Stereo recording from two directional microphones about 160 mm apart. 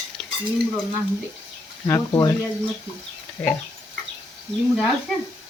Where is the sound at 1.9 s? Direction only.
20° left (ahead or behind).